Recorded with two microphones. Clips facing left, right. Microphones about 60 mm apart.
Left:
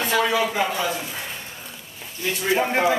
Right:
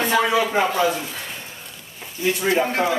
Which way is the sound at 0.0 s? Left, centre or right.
Right.